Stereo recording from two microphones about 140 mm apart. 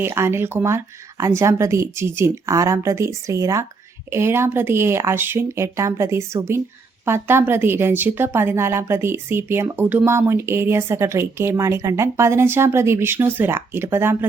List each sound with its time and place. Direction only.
0.0 s a woman's voice: 20° right (ahead or behind)